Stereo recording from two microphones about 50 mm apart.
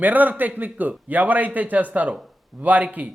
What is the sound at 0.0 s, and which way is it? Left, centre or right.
A man's voice, right.